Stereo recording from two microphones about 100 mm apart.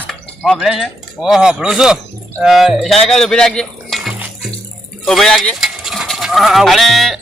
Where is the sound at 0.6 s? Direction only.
5° right (ahead or behind).